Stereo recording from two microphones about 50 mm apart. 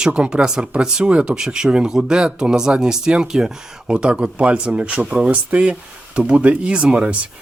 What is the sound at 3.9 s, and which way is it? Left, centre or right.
Speech, right.